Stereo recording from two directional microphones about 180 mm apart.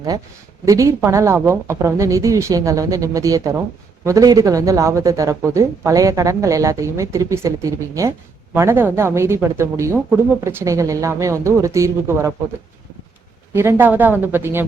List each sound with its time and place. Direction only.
0.6 s speech: 15° right (ahead or behind)
13.5 s speech: 15° right (ahead or behind)